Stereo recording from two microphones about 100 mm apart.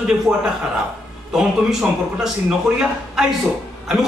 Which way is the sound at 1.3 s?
5° right (ahead or behind).